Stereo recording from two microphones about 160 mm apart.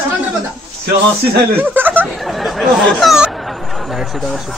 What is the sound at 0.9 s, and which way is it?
Speech, 90° right.